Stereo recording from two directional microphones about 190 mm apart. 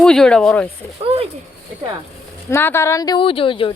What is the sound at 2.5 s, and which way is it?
Speech, 15° left (ahead or behind).